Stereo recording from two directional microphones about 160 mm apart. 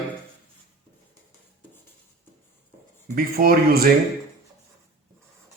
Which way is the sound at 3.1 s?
65° right (ahead or behind).